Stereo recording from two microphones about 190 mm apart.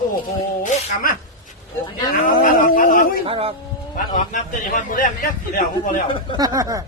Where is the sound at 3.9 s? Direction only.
45° left (ahead or behind).